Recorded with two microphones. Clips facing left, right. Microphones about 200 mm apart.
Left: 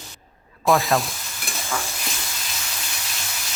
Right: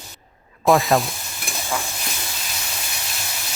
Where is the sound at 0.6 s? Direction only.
Centre (ahead or behind).